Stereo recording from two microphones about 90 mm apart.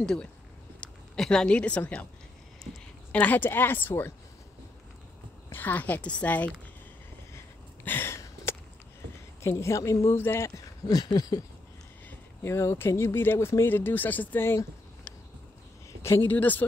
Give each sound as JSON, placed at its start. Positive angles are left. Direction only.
{"t": 0.0, "sound": "a woman's voice", "side_deg": 10}
{"t": 3.1, "sound": "speech", "side_deg": 20}
{"t": 5.5, "sound": "a woman's voice", "side_deg": 20}
{"t": 7.3, "sound": "a sound", "side_deg": 25}
{"t": 9.4, "sound": "speech", "side_deg": 30}
{"t": 10.9, "sound": "a sound", "side_deg": 45}
{"t": 12.1, "sound": "speech", "side_deg": 30}
{"t": 16.0, "sound": "speech", "side_deg": 25}